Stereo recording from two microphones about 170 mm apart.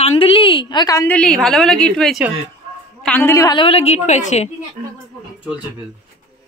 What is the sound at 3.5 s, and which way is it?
Speech, 35° left (ahead or behind).